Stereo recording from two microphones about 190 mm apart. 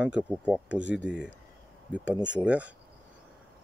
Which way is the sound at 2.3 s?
5° right (ahead or behind).